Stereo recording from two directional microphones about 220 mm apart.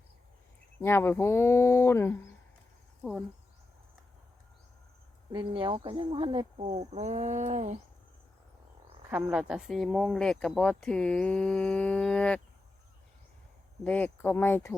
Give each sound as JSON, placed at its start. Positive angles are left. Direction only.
{"t": 0.8, "sound": "speech", "side_deg": 10}
{"t": 5.3, "sound": "speech", "side_deg": -20}
{"t": 9.0, "sound": "speech", "side_deg": -10}
{"t": 13.8, "sound": "speech", "side_deg": 5}